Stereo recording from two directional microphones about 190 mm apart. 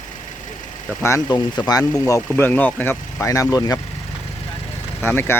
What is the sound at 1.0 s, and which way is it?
Speech, 20° left (ahead or behind).